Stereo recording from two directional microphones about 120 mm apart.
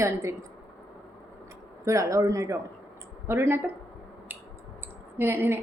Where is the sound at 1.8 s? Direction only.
25° right (ahead or behind).